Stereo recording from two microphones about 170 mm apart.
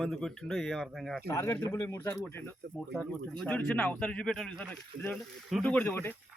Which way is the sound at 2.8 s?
Centre (ahead or behind).